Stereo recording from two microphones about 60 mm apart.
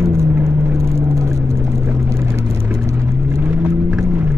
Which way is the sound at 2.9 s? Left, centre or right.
Right.